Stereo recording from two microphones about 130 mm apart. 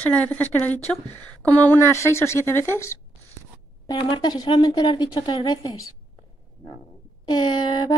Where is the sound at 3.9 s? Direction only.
35° left (ahead or behind).